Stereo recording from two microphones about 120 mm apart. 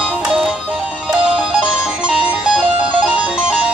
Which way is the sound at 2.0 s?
10° right (ahead or behind).